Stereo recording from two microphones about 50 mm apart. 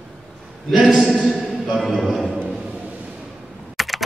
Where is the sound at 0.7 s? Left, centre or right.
Centre.